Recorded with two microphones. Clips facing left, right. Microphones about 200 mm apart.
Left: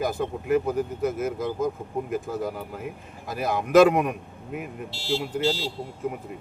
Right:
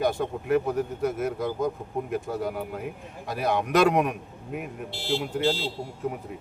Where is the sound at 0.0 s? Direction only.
Centre (ahead or behind).